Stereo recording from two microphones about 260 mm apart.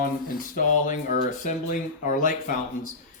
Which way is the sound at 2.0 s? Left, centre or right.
Left.